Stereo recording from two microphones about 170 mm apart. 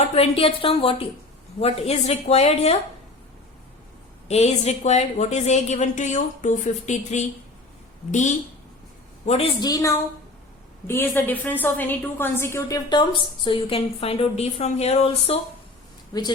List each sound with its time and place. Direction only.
0.1 s a woman's voice: 35° left (ahead or behind)
4.3 s a woman's voice: 40° left (ahead or behind)
9.2 s a woman's voice: 40° left (ahead or behind)
9.6 s a woman's voice: 20° left (ahead or behind); by 15.4 s 35° left (ahead or behind)